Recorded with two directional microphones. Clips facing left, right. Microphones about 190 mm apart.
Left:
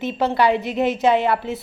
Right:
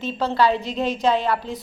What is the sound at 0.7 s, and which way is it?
Speech, 70° left (ahead or behind).